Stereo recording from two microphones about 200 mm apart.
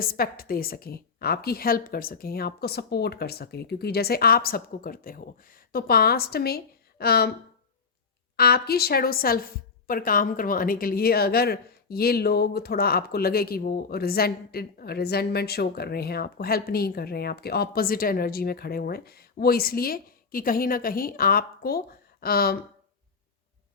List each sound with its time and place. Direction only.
0.0 s a woman's voice: 45° left (ahead or behind)
8.4 s a woman's voice: 50° left (ahead or behind)